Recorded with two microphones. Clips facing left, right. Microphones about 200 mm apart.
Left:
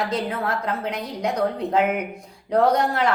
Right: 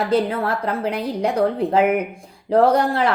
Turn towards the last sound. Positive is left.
turn(degrees=-30)  # may be behind; listen again after turning